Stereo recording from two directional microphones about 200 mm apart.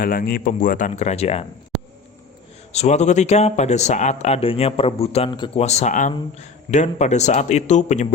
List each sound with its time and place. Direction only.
0.0 s a man's voice: 45° left (ahead or behind); by 1.5 s 30° left (ahead or behind)
2.7 s a man's voice: 35° left (ahead or behind)